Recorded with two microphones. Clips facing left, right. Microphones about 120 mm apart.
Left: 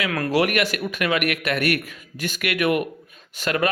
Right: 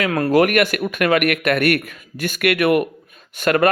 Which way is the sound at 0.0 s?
40° right (ahead or behind).